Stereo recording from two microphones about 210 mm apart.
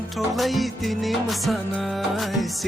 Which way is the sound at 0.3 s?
Centre (ahead or behind).